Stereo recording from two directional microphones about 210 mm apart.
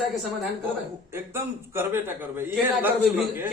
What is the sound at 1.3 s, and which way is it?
A man's voice, 10° right (ahead or behind).